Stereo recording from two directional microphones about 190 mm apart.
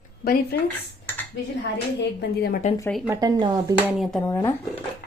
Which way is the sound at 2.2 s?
60° left (ahead or behind).